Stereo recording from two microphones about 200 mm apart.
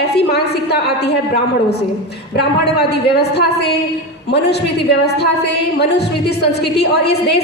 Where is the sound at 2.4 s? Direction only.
55° left (ahead or behind).